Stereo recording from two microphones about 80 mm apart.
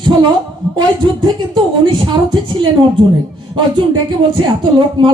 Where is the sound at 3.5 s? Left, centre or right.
Right.